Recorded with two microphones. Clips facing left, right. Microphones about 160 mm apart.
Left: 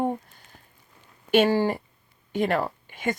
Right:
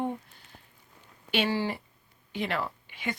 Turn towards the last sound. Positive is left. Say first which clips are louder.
# left 6 dB
turn(degrees=45)  # may be behind; listen again after turning